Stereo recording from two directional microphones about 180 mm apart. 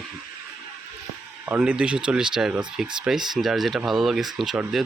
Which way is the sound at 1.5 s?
5° right (ahead or behind).